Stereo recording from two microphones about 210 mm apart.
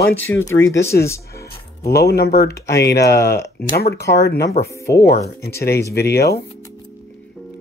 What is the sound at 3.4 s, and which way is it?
Speech, 50° left (ahead or behind).